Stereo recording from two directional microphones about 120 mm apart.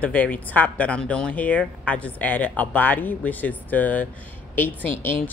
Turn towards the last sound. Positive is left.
turn(degrees=15)  # may be behind; listen again after turning